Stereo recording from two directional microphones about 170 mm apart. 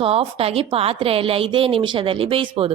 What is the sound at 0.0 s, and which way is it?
A woman's voice, 35° right (ahead or behind).